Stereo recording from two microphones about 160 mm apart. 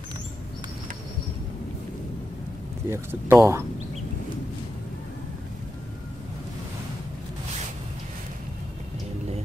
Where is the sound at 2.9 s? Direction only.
15° right (ahead or behind).